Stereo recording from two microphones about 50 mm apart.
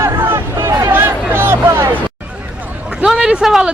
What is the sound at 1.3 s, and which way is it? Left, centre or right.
Hubbub, right.